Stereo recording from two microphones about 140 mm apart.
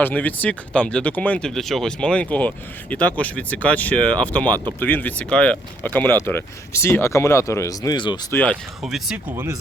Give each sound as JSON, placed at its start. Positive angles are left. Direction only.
{"t": 0.0, "sound": "speech", "side_deg": 10}
{"t": 8.3, "sound": "speech", "side_deg": 10}
{"t": 8.8, "sound": "speech", "side_deg": -5}